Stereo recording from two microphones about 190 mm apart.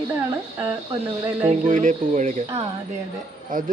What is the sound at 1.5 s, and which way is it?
Speech, 40° right (ahead or behind).